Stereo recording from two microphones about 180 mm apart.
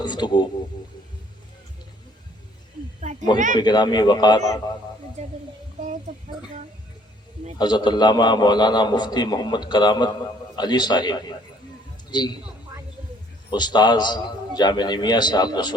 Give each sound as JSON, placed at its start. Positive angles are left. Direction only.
{"t": 0.0, "sound": "a man's voice", "side_deg": 25}
{"t": 3.3, "sound": "speech", "side_deg": -45}
{"t": 3.6, "sound": "a man's voice", "side_deg": 25}
{"t": 5.2, "sound": "speech", "side_deg": -40}
{"t": 7.6, "sound": "a man's voice", "side_deg": 25}
{"t": 13.5, "sound": "a man's voice", "side_deg": 25}